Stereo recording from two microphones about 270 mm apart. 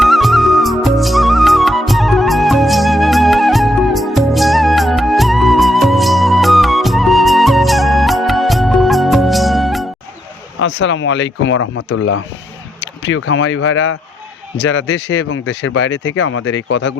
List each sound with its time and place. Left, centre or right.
0.0 s music: centre
10.6 s speech: left